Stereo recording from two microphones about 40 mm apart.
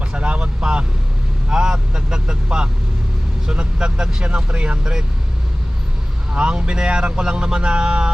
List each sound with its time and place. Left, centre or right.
0.1 s vehicle: right
1.5 s speech: centre
4.8 s speech: centre
6.3 s speech: right